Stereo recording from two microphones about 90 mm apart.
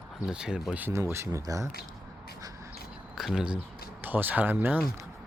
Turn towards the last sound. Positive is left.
turn(degrees=-20)  # may be behind; listen again after turning